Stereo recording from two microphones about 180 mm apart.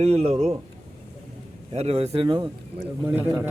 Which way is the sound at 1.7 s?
35° right (ahead or behind).